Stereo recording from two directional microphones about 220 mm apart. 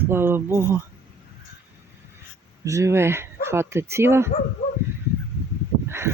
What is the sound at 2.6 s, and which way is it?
Speech, 15° right (ahead or behind).